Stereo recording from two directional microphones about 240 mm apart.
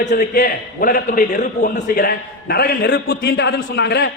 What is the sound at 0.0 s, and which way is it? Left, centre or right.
A man's voice, left.